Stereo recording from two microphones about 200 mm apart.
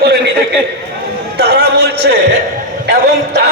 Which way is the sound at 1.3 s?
55° right (ahead or behind).